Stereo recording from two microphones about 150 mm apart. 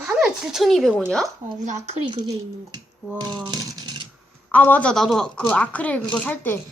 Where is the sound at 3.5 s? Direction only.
30° right (ahead or behind).